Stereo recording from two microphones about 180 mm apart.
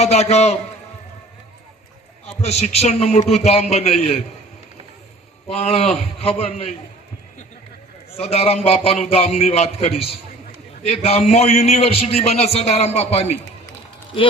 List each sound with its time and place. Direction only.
0.0 s a man's voice: 35° left (ahead or behind)
2.2 s a man's voice: 35° left (ahead or behind)
5.5 s a man's voice: 35° left (ahead or behind)
8.1 s a man's voice: 35° left (ahead or behind)